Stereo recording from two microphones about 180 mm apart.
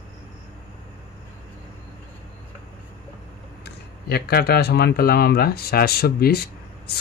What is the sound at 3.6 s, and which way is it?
Speech, 60° left (ahead or behind).